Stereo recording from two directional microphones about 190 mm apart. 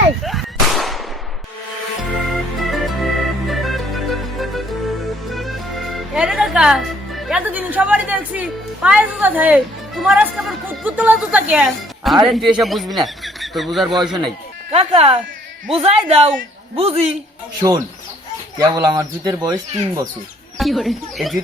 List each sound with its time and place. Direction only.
0.2 s a sound: centre (ahead or behind)
2.6 s music: centre (ahead or behind)
10.8 s speech: 10° right (ahead or behind)
14.7 s a man's voice: 30° right (ahead or behind)
18.6 s speech: 20° right (ahead or behind)
20.6 s speech: centre (ahead or behind)